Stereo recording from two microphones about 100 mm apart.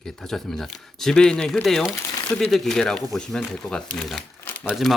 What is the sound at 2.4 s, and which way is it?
Speech, 5° left (ahead or behind).